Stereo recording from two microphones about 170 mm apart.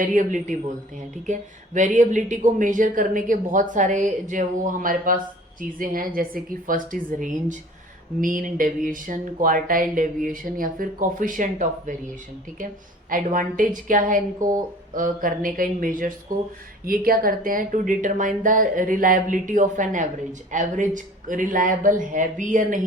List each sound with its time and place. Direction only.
0.0 s speech: 50° right (ahead or behind)
13.1 s speech: 55° right (ahead or behind)